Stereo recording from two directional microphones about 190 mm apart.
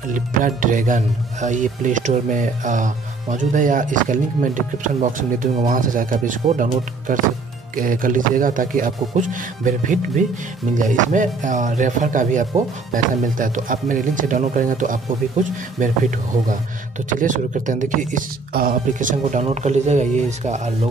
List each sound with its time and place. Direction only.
0.1 s speech: 45° right (ahead or behind)
17.1 s speech: 40° right (ahead or behind)